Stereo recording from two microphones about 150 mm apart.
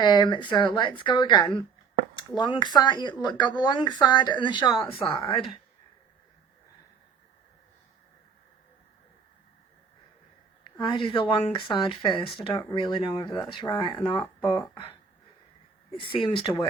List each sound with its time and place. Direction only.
0.0 s speech: 30° left (ahead or behind)
10.8 s speech: 30° left (ahead or behind)
16.0 s speech: 35° left (ahead or behind)